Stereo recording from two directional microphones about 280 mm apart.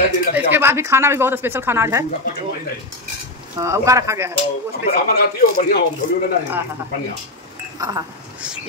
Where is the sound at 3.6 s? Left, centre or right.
Centre.